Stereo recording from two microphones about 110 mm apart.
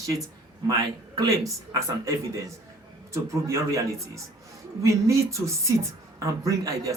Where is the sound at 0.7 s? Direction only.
35° right (ahead or behind).